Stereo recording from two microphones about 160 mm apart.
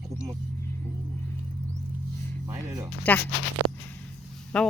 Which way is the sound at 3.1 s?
10° left (ahead or behind).